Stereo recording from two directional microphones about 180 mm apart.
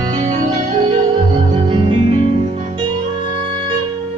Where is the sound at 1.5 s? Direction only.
30° right (ahead or behind).